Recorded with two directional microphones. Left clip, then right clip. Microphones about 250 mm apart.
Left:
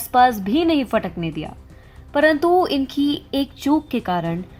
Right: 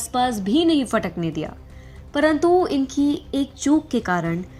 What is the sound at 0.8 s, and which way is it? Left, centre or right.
Speech, centre.